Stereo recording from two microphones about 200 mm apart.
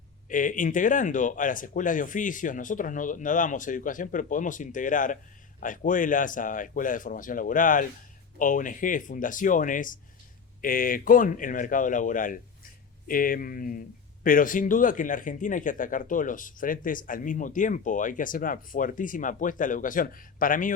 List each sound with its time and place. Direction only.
0.3 s speech: 40° left (ahead or behind)